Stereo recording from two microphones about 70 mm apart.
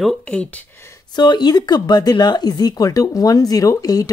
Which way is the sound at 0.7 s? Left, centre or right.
Left.